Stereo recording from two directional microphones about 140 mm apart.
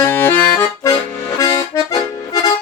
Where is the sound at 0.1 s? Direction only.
15° left (ahead or behind).